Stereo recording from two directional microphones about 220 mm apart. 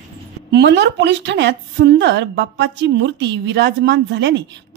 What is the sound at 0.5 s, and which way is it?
A woman's voice, 50° right (ahead or behind).